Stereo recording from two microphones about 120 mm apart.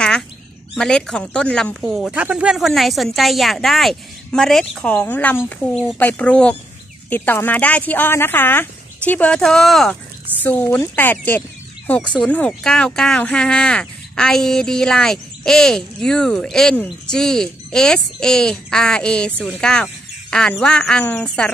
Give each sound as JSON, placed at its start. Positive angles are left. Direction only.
{"t": 0.7, "sound": "speech", "side_deg": 5}
{"t": 10.4, "sound": "speech", "side_deg": 15}